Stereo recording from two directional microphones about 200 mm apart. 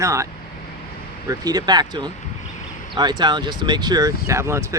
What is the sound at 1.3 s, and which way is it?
Speech, 20° right (ahead or behind).